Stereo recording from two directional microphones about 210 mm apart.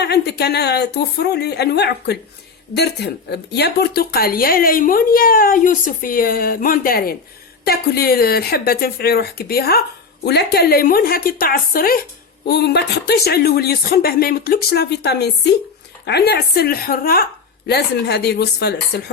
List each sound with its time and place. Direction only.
0.0 s speech: 50° left (ahead or behind)